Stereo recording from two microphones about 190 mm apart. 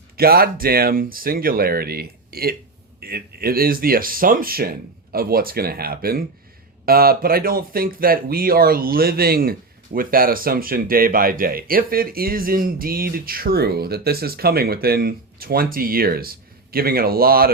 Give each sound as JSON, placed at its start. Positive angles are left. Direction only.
{"t": 0.2, "sound": "speech", "side_deg": -50}